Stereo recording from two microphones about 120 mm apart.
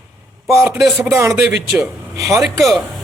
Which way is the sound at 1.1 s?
20° right (ahead or behind).